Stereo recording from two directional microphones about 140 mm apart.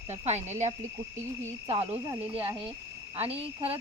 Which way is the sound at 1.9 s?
10° right (ahead or behind).